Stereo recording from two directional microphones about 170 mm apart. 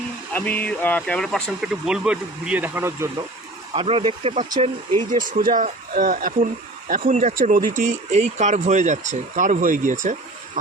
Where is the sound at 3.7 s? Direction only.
30° right (ahead or behind).